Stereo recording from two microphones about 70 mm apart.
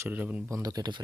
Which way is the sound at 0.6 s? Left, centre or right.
Right.